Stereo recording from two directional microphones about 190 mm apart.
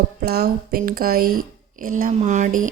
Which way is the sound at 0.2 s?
55° right (ahead or behind).